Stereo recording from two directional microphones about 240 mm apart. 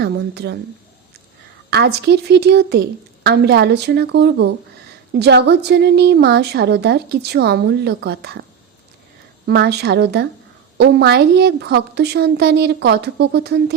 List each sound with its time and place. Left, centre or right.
0.0 s a woman's voice: right
1.7 s a woman's voice: right
9.5 s a woman's voice: right